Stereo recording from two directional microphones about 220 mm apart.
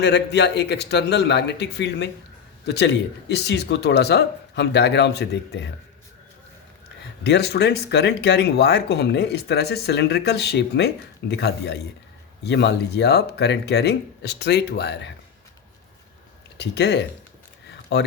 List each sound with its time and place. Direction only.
0.0 s speech: 50° left (ahead or behind)
7.3 s speech: 50° left (ahead or behind)
16.6 s speech: 50° left (ahead or behind)
17.7 s a sound: 50° left (ahead or behind)